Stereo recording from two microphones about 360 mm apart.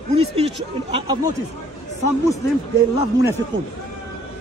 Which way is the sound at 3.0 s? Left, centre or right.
Centre.